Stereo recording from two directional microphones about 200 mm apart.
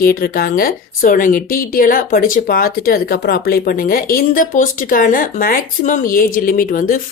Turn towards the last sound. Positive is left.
turn(degrees=40)  # may be behind; listen again after turning